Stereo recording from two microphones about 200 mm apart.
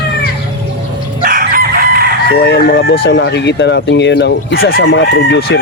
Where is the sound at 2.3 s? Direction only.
55° left (ahead or behind).